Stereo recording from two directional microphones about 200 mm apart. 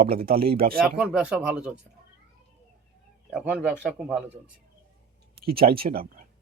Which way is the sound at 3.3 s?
5° right (ahead or behind).